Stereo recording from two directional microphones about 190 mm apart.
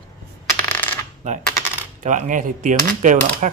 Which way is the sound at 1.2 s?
35° right (ahead or behind).